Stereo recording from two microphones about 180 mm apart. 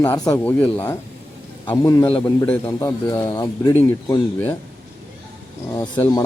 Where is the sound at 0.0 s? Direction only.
10° left (ahead or behind).